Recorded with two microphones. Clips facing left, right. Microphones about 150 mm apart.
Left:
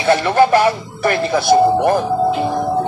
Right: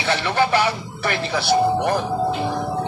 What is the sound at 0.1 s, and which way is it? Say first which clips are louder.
Speech: left 7 dB; 45° left (ahead or behind).